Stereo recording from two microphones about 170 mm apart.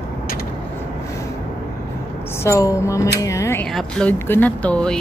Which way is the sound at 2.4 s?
15° left (ahead or behind).